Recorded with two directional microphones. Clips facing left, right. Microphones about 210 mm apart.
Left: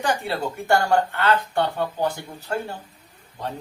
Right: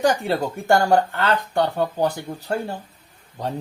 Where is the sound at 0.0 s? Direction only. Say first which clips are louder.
Right 5 dB; 40° right (ahead or behind).